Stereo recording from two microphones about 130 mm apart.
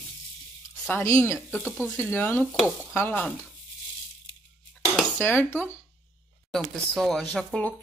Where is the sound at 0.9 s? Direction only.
15° left (ahead or behind).